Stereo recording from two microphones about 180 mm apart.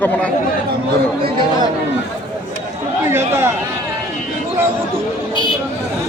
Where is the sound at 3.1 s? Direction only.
15° right (ahead or behind).